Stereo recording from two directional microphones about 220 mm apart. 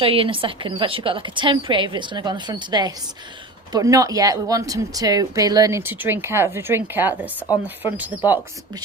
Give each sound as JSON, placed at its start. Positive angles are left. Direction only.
{"t": 0.0, "sound": "a woman's voice", "side_deg": -25}